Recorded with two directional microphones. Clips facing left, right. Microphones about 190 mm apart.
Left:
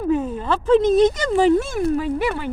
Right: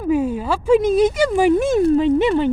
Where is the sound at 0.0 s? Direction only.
10° right (ahead or behind).